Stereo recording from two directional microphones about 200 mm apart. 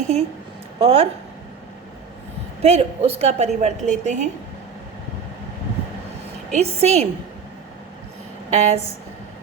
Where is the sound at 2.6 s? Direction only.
30° right (ahead or behind).